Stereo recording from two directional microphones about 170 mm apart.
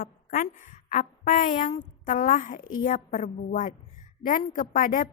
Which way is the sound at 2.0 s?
50° left (ahead or behind).